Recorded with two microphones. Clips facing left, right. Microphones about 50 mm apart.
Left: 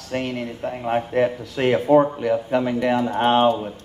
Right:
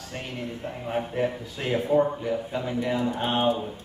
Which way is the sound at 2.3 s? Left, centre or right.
Left.